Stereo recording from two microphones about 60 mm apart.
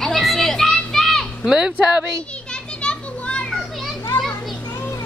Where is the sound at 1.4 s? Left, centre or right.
Centre.